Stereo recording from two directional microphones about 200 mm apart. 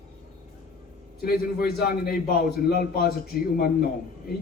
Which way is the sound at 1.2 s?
50° left (ahead or behind).